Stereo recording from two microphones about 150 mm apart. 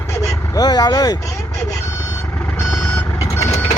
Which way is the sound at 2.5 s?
20° left (ahead or behind).